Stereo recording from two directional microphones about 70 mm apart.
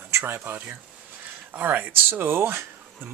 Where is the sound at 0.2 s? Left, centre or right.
Right.